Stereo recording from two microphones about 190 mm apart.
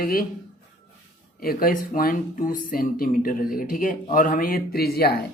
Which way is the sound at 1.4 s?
50° left (ahead or behind).